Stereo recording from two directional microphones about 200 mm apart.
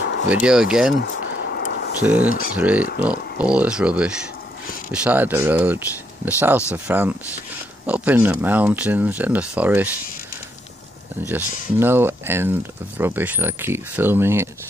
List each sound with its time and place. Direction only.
0.0 s a sound: 55° left (ahead or behind)
0.3 s speech: 5° right (ahead or behind)
1.0 s a sound: 60° left (ahead or behind)
1.6 s vehicle: 55° left (ahead or behind)
2.2 s speech: 45° left (ahead or behind)
2.5 s speech: 5° right (ahead or behind)
11.2 s speech: 10° right (ahead or behind)